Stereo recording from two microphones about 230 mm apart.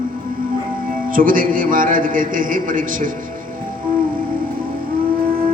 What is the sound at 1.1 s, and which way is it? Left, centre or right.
A man's voice, right.